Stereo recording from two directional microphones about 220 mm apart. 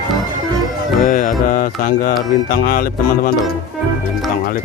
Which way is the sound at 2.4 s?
40° left (ahead or behind).